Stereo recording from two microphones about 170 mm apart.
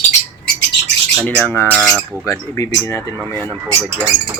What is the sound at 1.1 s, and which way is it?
Speech, 5° right (ahead or behind).